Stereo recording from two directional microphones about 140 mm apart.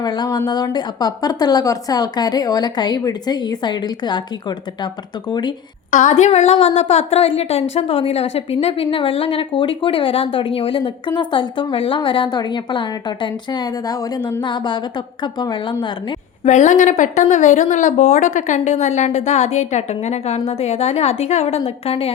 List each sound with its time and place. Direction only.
0.0 s a woman's voice: 30° left (ahead or behind)
5.9 s speech: 60° left (ahead or behind); by 16.1 s 35° left (ahead or behind)
16.4 s speech: 55° left (ahead or behind)